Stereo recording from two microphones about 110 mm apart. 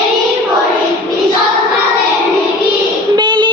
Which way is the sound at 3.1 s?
45° right (ahead or behind).